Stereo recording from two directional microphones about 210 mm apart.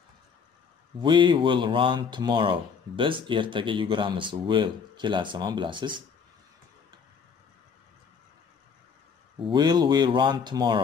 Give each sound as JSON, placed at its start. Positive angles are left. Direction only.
{"t": 1.0, "sound": "speech", "side_deg": -25}
{"t": 9.4, "sound": "speech", "side_deg": -20}